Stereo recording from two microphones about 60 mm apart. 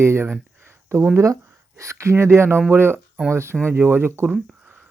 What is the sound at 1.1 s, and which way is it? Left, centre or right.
Speech, right.